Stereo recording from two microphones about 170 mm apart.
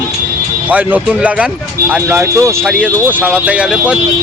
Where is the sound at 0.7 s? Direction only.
10° right (ahead or behind).